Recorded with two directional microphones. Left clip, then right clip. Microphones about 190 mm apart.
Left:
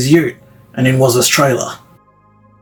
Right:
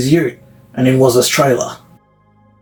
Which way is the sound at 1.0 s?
40° left (ahead or behind).